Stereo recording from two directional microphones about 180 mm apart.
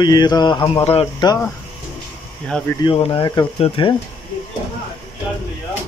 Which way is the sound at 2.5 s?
5° left (ahead or behind).